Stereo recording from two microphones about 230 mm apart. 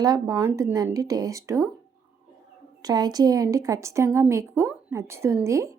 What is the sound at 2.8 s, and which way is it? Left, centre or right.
Speech, centre.